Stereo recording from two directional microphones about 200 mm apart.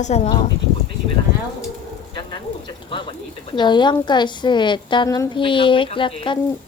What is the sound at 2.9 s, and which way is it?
Speech, 25° left (ahead or behind).